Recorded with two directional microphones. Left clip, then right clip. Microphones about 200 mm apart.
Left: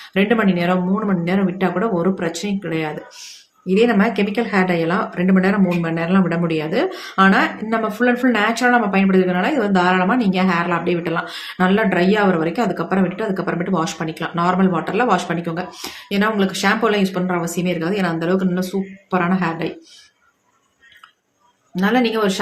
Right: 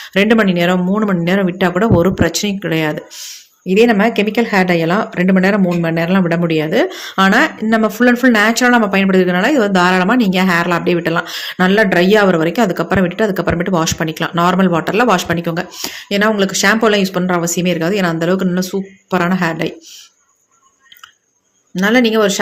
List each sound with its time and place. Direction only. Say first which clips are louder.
0.1 s speech: right 5 dB; 40° right (ahead or behind)
21.8 s speech: right 5 dB; 40° right (ahead or behind)